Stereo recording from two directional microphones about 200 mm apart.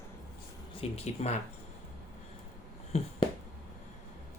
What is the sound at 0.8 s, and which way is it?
Speech, 30° left (ahead or behind).